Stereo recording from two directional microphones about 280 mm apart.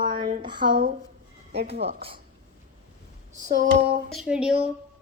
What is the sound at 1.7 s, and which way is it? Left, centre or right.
Speech, right.